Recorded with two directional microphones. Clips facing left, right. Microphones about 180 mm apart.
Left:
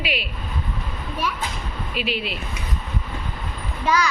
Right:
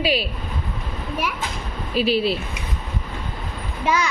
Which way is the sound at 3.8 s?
25° right (ahead or behind).